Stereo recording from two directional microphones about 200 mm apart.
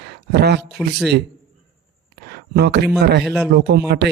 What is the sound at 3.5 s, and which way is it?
Speech, 55° right (ahead or behind).